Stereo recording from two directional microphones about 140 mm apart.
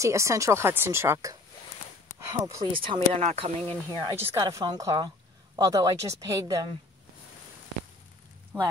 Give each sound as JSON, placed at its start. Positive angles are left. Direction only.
{"t": 0.0, "sound": "speech", "side_deg": -20}
{"t": 2.7, "sound": "speech", "side_deg": -40}
{"t": 4.4, "sound": "speech", "side_deg": -25}
{"t": 8.5, "sound": "speech", "side_deg": -20}